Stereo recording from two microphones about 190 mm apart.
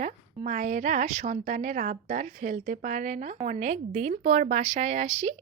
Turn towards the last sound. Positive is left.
turn(degrees=-35)  # may be behind; listen again after turning